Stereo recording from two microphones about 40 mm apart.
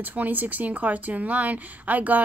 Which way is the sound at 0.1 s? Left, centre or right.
Right.